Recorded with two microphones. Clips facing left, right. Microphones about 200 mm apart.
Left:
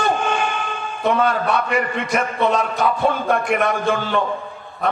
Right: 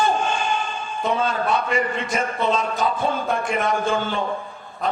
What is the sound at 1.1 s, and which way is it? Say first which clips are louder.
A man's voice: left 4 dB; 65° left (ahead or behind).